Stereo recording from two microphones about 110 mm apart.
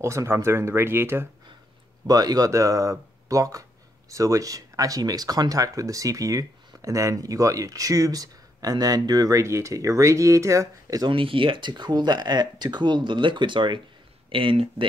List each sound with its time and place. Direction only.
0.0 s speech: 25° right (ahead or behind)
2.0 s speech: 35° right (ahead or behind)
11.1 s speech: 50° right (ahead or behind)